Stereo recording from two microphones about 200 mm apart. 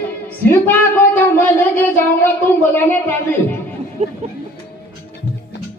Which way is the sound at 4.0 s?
35° right (ahead or behind).